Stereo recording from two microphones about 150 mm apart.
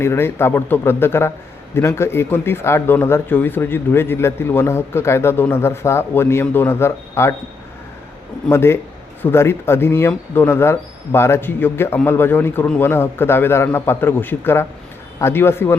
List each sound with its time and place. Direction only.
0.0 s speech: 15° left (ahead or behind)
8.4 s speech: 15° left (ahead or behind)